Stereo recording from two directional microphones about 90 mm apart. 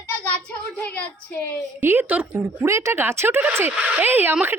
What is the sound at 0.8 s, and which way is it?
Speech, 15° left (ahead or behind).